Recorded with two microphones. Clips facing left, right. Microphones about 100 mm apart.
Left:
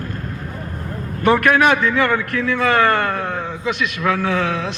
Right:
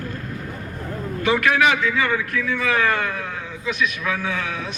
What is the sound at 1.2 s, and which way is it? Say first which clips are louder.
A man's voice: left 4 dB; 55° left (ahead or behind).